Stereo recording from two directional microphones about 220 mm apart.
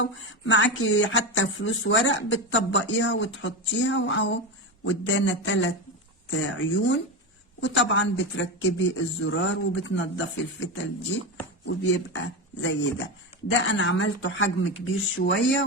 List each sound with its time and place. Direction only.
0.0 s speech: 60° left (ahead or behind)